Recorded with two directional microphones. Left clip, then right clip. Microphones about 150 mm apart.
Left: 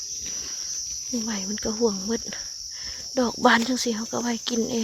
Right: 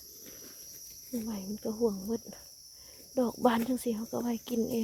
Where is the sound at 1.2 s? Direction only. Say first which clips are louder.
Left 7 dB; 10° left (ahead or behind).